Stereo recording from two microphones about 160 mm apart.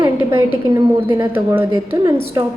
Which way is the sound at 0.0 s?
15° right (ahead or behind).